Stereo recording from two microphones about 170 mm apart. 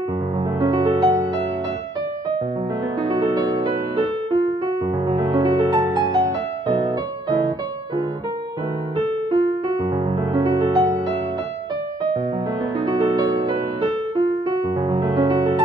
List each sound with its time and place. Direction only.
0.6 s music: 25° right (ahead or behind)
3.1 s music: 25° right (ahead or behind)
6.7 s music: 35° right (ahead or behind)
9.3 s music: 30° right (ahead or behind)
10.3 s music: 20° right (ahead or behind)
12.8 s music: 25° right (ahead or behind)